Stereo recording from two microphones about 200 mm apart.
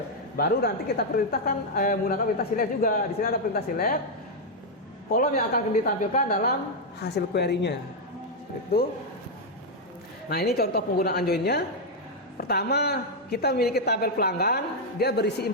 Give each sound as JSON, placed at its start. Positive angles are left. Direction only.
{"t": 0.3, "sound": "a woman's voice", "side_deg": 50}
{"t": 5.1, "sound": "a woman's voice", "side_deg": 45}
{"t": 10.2, "sound": "a woman's voice", "side_deg": 50}